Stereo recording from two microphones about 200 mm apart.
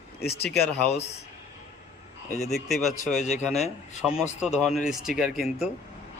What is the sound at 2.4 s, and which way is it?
Speech, centre (ahead or behind).